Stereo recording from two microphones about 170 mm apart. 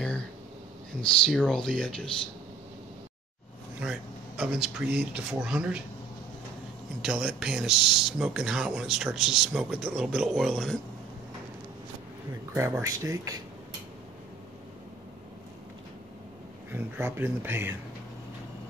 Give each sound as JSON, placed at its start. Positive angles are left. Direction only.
{"t": 1.2, "sound": "speech", "side_deg": 5}
{"t": 3.8, "sound": "speech", "side_deg": -5}
{"t": 7.0, "sound": "speech", "side_deg": -5}
{"t": 12.5, "sound": "speech", "side_deg": -15}
{"t": 16.7, "sound": "speech", "side_deg": -10}